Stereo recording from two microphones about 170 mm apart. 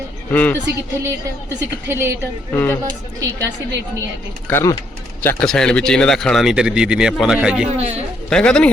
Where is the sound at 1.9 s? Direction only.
15° right (ahead or behind).